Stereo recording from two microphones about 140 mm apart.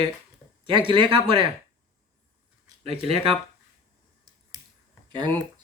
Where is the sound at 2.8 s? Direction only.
45° right (ahead or behind).